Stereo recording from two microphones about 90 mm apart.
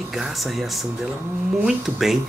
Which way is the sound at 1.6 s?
5° right (ahead or behind).